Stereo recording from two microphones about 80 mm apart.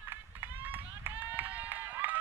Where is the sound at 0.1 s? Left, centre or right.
Right.